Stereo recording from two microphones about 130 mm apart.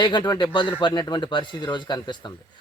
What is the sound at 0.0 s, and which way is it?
Speech, 35° left (ahead or behind).